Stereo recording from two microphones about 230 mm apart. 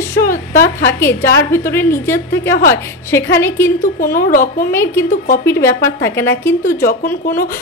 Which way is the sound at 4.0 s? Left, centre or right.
Left.